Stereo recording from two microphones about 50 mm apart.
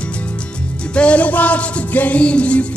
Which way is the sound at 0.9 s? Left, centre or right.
Left.